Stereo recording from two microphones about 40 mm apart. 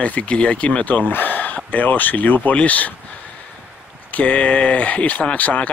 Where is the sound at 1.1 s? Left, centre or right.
Left.